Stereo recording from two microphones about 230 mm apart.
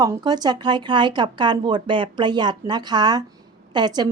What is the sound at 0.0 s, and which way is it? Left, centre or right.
A woman's voice, centre.